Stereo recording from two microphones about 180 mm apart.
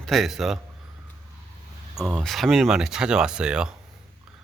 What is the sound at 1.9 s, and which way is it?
Speech, centre (ahead or behind).